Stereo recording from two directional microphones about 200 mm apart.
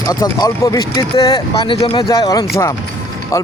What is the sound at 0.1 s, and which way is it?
Speech, 20° left (ahead or behind).